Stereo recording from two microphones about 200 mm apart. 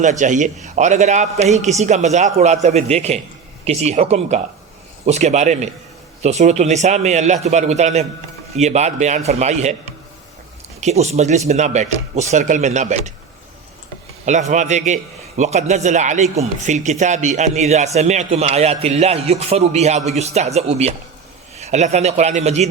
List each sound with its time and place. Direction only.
0.0 s a man's voice: 40° right (ahead or behind)
10.8 s a man's voice: 35° right (ahead or behind)
14.3 s a man's voice: 35° right (ahead or behind)